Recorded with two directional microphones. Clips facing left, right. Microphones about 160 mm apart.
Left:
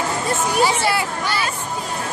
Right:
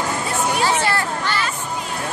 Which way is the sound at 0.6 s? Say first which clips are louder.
Even; 10° left (ahead or behind).